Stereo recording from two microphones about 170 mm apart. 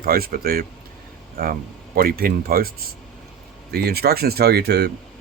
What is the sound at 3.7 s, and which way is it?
Speech, 65° right (ahead or behind).